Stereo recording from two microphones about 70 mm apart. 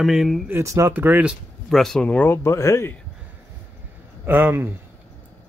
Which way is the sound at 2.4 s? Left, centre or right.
Left.